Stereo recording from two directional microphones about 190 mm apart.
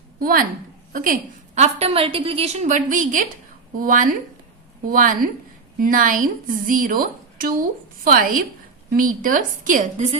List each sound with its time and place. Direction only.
0.2 s a woman's voice: 50° right (ahead or behind)